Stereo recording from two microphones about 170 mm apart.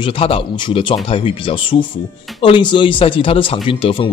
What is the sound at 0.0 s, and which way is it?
Speech, 30° left (ahead or behind).